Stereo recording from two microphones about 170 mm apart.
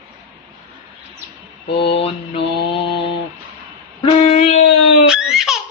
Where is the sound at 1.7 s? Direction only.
35° left (ahead or behind).